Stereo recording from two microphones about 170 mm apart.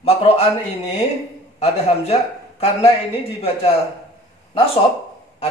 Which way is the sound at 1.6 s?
35° left (ahead or behind).